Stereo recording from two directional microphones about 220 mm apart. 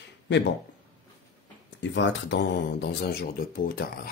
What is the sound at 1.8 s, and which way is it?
Speech, 55° left (ahead or behind).